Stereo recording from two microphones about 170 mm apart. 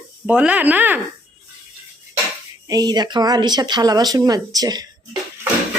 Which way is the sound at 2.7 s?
25° right (ahead or behind).